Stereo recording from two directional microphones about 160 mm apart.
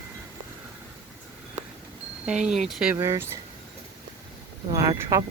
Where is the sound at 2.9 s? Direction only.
15° right (ahead or behind).